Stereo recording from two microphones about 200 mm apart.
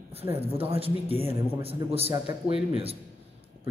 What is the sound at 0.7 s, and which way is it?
A man's voice, 30° right (ahead or behind).